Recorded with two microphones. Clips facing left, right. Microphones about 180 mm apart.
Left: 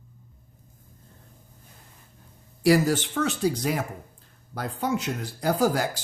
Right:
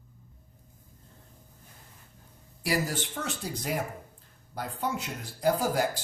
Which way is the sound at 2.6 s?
90° left.